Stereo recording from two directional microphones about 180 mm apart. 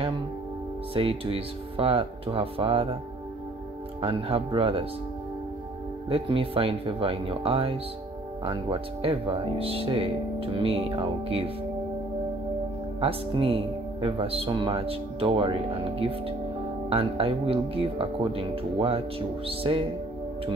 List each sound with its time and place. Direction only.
0.9 s speech: 30° right (ahead or behind)
4.0 s speech: 30° right (ahead or behind)
6.0 s speech: 30° right (ahead or behind)
13.0 s speech: 30° right (ahead or behind)